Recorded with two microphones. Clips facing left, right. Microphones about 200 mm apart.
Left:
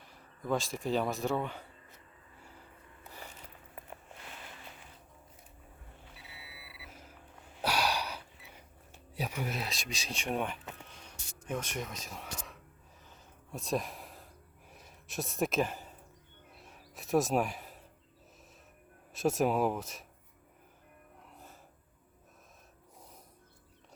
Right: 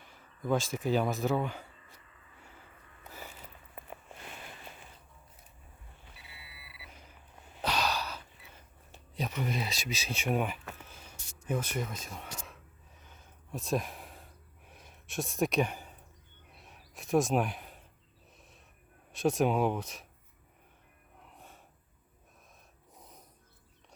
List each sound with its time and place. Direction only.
0.0 s speech: centre (ahead or behind)
2.4 s a sound: centre (ahead or behind)
6.3 s vehicle: 5° left (ahead or behind)
7.6 s gasp: 10° left (ahead or behind)
9.1 s speech: 10° left (ahead or behind)
10.8 s a sound: 5° right (ahead or behind)
13.1 s gasp: centre (ahead or behind)
16.5 s a sound: centre (ahead or behind)
19.1 s speech: centre (ahead or behind)
21.3 s gasp: centre (ahead or behind)